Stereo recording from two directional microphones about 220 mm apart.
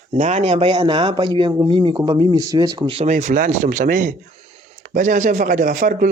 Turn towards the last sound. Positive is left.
turn(degrees=-35)  # may be behind; listen again after turning